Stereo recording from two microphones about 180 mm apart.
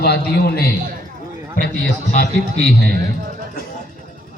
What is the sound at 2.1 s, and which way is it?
Speech, 40° left (ahead or behind).